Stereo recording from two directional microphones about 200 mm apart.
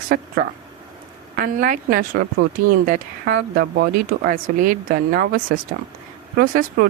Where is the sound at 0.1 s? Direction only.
45° right (ahead or behind).